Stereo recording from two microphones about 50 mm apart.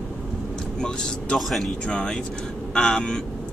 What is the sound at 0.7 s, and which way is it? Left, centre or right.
Vehicle, centre.